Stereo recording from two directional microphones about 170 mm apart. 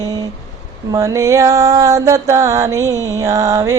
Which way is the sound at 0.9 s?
20° right (ahead or behind).